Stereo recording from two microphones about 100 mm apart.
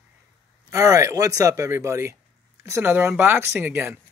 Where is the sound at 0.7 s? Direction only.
35° right (ahead or behind).